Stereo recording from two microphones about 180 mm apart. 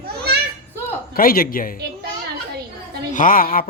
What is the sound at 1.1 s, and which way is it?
Speech, 55° left (ahead or behind).